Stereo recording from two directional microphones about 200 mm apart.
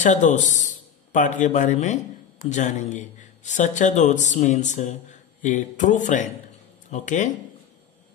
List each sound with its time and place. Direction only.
0.0 s a man's voice: 40° left (ahead or behind)